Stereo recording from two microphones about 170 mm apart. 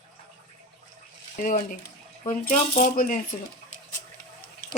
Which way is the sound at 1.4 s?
55° left (ahead or behind).